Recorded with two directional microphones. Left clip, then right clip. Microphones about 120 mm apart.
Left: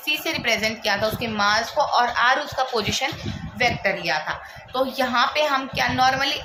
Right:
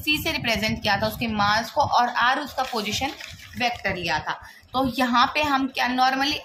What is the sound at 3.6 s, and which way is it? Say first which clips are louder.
A woman's voice: left 4 dB; 45° right (ahead or behind).